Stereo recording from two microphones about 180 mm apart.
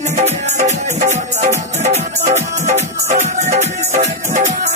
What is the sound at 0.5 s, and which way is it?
Music, 40° right (ahead or behind).